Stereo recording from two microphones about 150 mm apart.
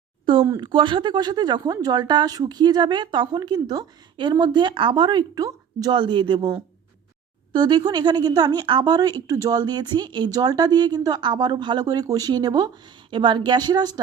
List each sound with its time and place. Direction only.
0.4 s speech: 30° right (ahead or behind)